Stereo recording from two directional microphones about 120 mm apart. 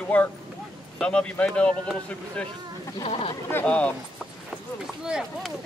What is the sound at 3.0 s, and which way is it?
Speech, 55° left (ahead or behind).